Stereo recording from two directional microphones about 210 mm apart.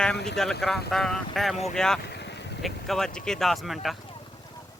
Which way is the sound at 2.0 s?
55° left (ahead or behind).